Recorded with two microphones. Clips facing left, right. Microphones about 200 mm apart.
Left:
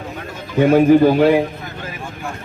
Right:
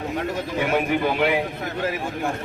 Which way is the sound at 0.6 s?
35° left (ahead or behind).